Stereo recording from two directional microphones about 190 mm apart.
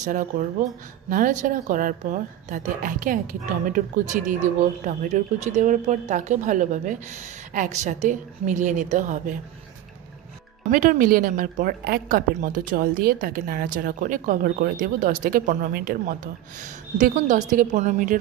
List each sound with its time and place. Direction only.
0.0 s a woman's voice: 40° right (ahead or behind)
10.7 s a woman's voice: 45° right (ahead or behind)
17.0 s speech: 40° right (ahead or behind)